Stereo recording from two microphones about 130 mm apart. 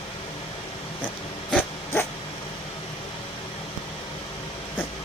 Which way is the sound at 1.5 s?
15° left (ahead or behind).